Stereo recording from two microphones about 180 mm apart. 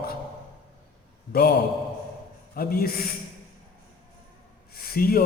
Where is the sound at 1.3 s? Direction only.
60° left (ahead or behind).